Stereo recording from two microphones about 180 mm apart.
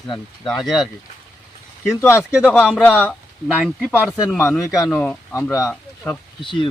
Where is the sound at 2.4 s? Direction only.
10° left (ahead or behind).